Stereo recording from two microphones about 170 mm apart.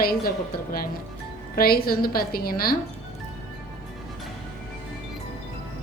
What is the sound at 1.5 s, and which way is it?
A woman's voice, 60° left (ahead or behind).